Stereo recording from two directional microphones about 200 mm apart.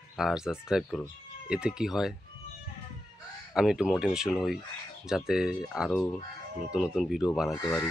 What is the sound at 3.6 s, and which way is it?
Speech, centre (ahead or behind).